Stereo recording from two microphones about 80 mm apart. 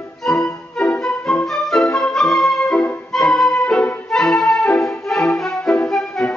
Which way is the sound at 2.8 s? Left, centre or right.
Centre.